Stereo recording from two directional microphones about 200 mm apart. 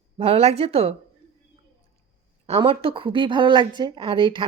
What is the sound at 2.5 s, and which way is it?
A woman's voice, 25° right (ahead or behind).